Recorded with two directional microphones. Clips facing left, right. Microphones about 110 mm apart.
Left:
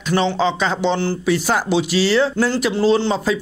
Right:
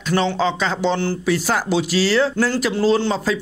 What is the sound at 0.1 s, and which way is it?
Speech, 20° left (ahead or behind).